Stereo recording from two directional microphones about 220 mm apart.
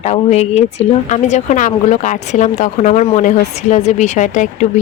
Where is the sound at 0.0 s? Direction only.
30° left (ahead or behind).